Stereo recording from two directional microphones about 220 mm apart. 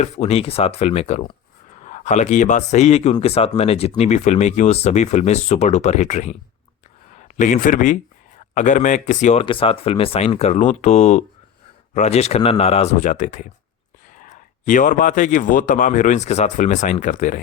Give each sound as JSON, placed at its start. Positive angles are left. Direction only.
{"t": 0.0, "sound": "speech", "side_deg": 30}